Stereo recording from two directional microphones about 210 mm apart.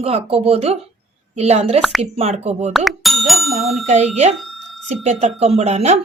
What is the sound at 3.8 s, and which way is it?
Speech, 35° right (ahead or behind).